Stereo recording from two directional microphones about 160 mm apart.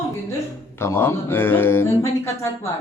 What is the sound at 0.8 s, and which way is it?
Speech, 15° left (ahead or behind).